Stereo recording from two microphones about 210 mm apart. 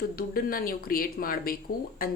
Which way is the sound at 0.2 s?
45° left (ahead or behind).